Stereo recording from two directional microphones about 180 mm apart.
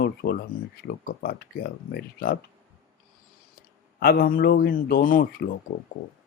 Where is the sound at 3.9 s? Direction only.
55° left (ahead or behind).